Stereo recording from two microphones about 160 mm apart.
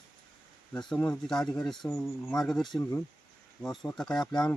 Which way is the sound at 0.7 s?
5° left (ahead or behind).